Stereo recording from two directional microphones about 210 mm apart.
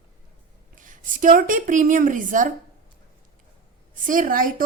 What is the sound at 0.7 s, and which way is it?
A woman's voice, 40° right (ahead or behind).